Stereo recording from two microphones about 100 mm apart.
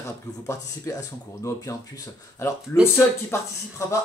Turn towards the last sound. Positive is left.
turn(degrees=25)  # may be behind; listen again after turning